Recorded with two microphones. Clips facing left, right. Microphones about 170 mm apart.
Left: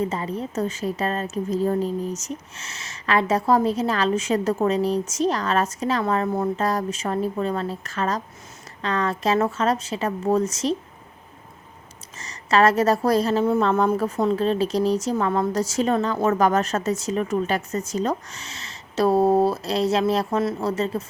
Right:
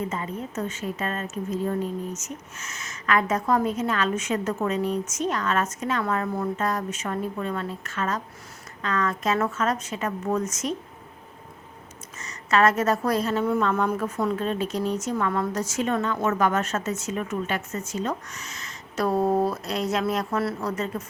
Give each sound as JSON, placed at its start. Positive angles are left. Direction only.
{"t": 0.1, "sound": "a woman's voice", "side_deg": 35}
{"t": 12.1, "sound": "a woman's voice", "side_deg": 35}